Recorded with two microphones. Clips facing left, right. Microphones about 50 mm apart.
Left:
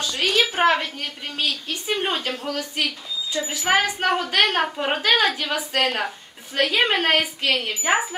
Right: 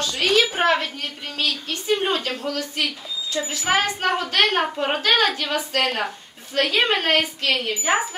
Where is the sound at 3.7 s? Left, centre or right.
Centre.